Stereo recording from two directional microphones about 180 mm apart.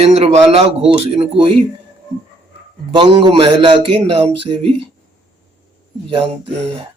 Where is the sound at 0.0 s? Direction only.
35° right (ahead or behind).